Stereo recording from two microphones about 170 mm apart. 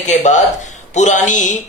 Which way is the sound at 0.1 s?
45° left (ahead or behind).